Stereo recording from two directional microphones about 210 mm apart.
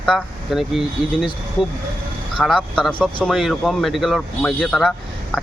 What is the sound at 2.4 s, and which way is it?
Speech, centre (ahead or behind).